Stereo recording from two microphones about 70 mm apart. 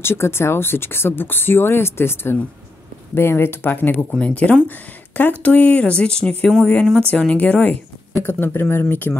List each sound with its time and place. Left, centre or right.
0.0 s speech: left